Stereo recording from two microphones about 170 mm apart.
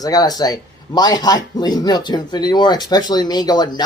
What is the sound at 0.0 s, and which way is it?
Speech, 20° left (ahead or behind).